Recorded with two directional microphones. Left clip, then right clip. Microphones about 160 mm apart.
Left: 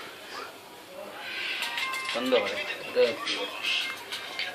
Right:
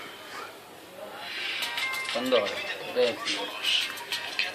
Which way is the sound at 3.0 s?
10° right (ahead or behind).